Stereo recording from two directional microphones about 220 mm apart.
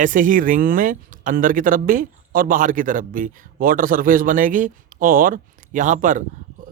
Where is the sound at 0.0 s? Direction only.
35° right (ahead or behind).